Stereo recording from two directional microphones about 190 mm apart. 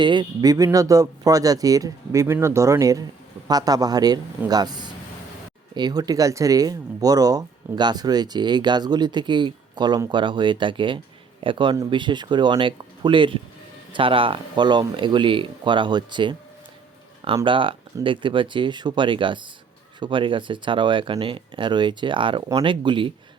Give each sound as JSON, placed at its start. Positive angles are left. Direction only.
{"t": 0.0, "sound": "speech", "side_deg": -25}
{"t": 17.3, "sound": "speech", "side_deg": -25}